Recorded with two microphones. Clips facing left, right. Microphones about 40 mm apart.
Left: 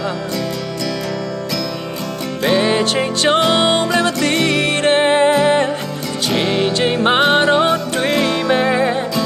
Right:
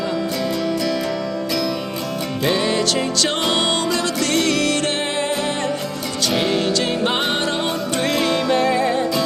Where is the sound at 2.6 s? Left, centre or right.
Left.